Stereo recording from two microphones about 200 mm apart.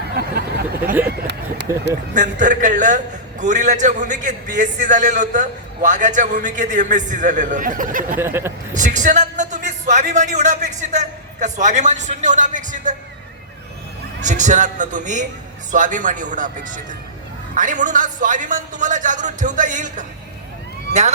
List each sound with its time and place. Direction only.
0.2 s a sound: 55° right (ahead or behind)
1.0 s speech: 55° right (ahead or behind)
2.1 s a man's voice: 40° right (ahead or behind)
8.2 s speech: 10° right (ahead or behind)
8.7 s a man's voice: 40° right (ahead or behind)
14.2 s a man's voice: 35° right (ahead or behind)